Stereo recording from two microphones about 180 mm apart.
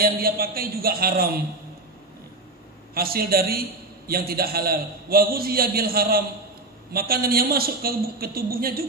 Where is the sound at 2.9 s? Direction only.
55° right (ahead or behind).